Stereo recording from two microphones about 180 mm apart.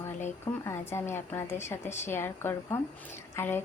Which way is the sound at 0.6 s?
15° left (ahead or behind).